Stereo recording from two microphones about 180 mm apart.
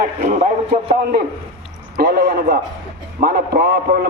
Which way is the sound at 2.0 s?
60° right (ahead or behind).